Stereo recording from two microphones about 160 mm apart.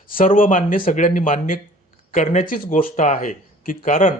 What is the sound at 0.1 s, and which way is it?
Speech, 60° left (ahead or behind).